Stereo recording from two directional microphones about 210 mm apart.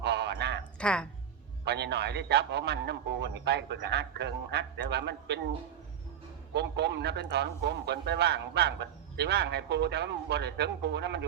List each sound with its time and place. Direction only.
0.0 s a sound: 55° right (ahead or behind)
0.8 s speech: 5° left (ahead or behind)
1.6 s a man's voice: 55° right (ahead or behind)
6.5 s a man's voice: 55° right (ahead or behind)